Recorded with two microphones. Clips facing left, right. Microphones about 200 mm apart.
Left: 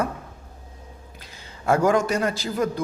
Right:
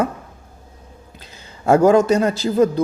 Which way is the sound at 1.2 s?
25° right (ahead or behind).